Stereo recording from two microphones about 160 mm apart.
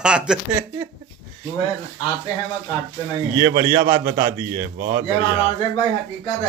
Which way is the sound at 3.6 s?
25° right (ahead or behind).